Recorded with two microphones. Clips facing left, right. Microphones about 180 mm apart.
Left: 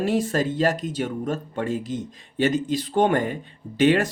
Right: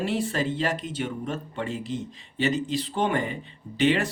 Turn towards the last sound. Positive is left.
turn(degrees=45)  # may be behind; listen again after turning